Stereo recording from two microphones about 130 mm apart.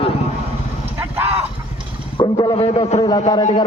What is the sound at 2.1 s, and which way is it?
Speech, 30° left (ahead or behind).